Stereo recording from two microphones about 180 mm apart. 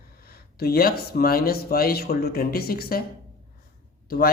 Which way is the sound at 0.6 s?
55° left (ahead or behind).